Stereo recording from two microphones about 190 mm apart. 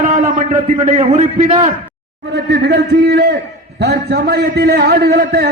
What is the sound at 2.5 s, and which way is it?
A man's voice, 60° right (ahead or behind).